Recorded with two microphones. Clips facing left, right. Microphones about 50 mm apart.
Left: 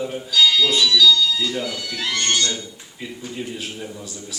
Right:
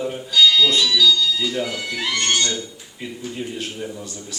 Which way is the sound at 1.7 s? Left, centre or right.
Centre.